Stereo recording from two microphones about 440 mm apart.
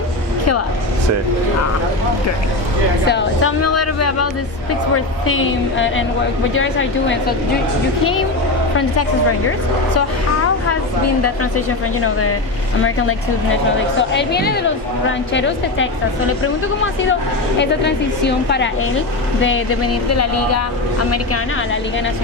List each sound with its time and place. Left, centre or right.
3.1 s speech: left
11.5 s speech: left
17.6 s speech: left